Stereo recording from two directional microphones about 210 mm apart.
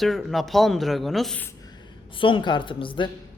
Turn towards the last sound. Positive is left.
turn(degrees=25)  # may be behind; listen again after turning